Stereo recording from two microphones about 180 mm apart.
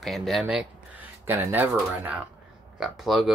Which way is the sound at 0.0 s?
Centre (ahead or behind).